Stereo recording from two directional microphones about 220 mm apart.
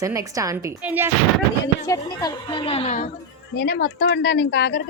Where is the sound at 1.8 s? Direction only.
15° left (ahead or behind); by 3.1 s 30° left (ahead or behind).